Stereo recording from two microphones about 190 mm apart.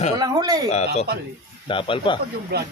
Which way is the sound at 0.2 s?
20° right (ahead or behind).